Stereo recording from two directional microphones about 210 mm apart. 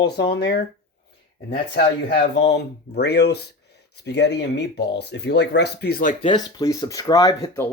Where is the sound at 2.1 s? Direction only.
55° left (ahead or behind).